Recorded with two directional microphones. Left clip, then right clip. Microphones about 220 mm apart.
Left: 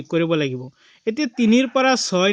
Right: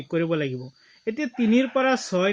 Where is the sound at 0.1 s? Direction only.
45° left (ahead or behind).